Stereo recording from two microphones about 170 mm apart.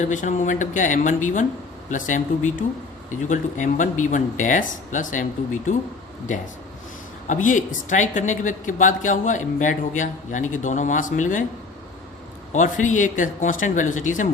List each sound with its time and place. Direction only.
0.0 s a woman's voice: 45° left (ahead or behind)
7.3 s a woman's voice: 50° left (ahead or behind)
12.5 s a woman's voice: 50° left (ahead or behind)